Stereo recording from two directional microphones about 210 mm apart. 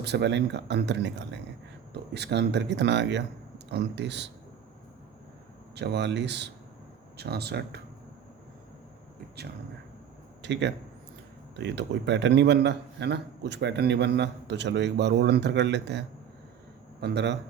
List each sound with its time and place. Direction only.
0.0 s a man's voice: 55° right (ahead or behind)
5.7 s a man's voice: 55° right (ahead or behind)
10.4 s a man's voice: 55° right (ahead or behind)